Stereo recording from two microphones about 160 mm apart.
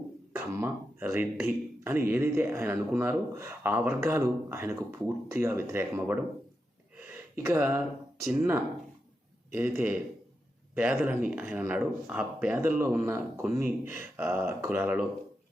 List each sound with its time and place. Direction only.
0.3 s speech: 15° right (ahead or behind)
6.9 s gasp: 15° right (ahead or behind)
8.2 s speech: 15° right (ahead or behind)